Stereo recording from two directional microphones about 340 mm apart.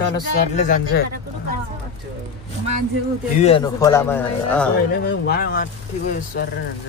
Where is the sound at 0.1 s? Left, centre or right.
Left.